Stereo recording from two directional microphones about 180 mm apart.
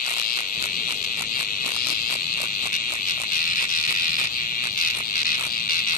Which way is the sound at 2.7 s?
50° left (ahead or behind).